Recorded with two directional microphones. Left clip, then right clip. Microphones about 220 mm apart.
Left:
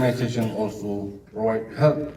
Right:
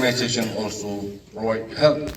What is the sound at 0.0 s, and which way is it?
A man's voice, 50° left (ahead or behind).